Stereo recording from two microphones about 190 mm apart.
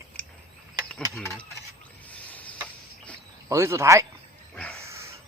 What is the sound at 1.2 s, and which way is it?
Speech, 15° left (ahead or behind).